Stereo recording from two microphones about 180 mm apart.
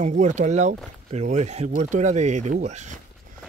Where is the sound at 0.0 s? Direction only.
45° right (ahead or behind).